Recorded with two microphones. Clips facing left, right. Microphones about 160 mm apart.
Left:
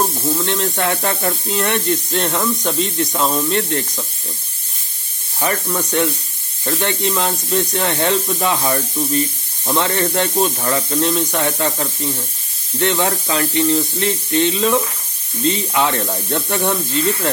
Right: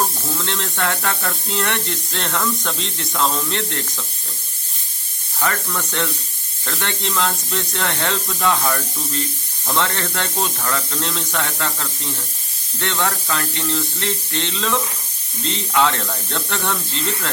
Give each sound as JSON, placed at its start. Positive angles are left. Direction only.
{"t": 0.3, "sound": "speech", "side_deg": 15}
{"t": 5.4, "sound": "speech", "side_deg": 20}